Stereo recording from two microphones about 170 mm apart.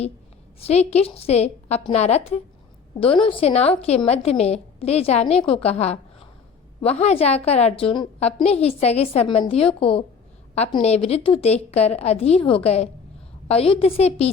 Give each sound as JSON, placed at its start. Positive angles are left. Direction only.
{"t": 0.7, "sound": "a woman's voice", "side_deg": 40}